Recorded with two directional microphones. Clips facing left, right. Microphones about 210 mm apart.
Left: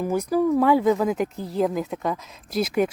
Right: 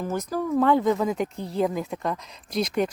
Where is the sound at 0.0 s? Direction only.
10° left (ahead or behind).